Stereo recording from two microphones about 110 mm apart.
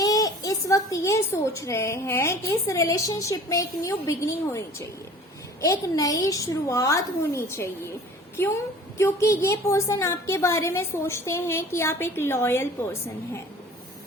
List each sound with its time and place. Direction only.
0.0 s a woman's voice: 35° left (ahead or behind)